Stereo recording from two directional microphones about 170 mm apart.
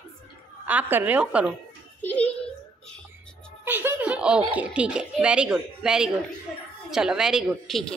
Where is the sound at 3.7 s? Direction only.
10° right (ahead or behind).